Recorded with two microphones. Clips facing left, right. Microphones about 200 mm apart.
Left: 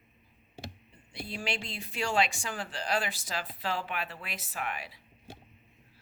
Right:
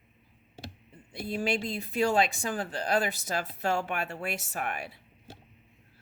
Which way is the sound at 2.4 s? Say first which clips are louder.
Right 5 dB; 45° right (ahead or behind).